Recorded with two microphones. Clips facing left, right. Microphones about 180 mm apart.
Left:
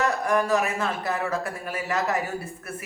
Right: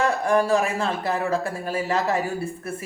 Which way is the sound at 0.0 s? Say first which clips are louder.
Right 3 dB; 30° right (ahead or behind).